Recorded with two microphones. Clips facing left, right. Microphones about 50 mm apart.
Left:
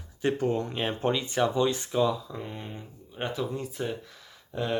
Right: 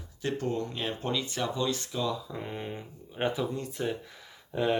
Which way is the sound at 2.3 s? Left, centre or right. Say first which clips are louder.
Right 1 dB; centre.